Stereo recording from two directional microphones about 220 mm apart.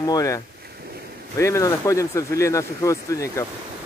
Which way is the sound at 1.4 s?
15° left (ahead or behind).